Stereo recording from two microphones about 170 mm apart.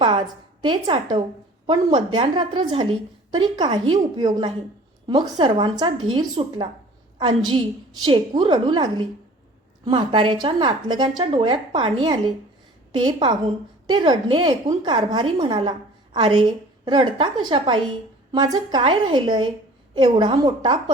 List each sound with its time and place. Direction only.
0.0 s a woman's voice: 30° right (ahead or behind)